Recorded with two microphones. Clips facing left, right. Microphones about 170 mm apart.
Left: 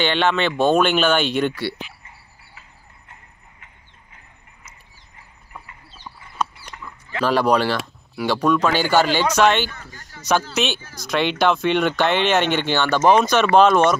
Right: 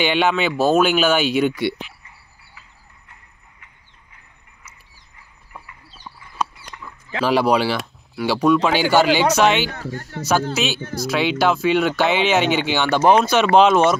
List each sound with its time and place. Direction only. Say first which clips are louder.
0.0 s speech: right 1 dB; 10° right (ahead or behind)
7.2 s speech: right 1 dB; 10° right (ahead or behind)
9.7 s speech: right 10 dB; 65° right (ahead or behind)
10.5 s speech: right 1 dB; 5° right (ahead or behind)